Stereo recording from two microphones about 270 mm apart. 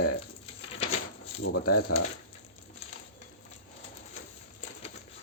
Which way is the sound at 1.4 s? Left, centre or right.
Left.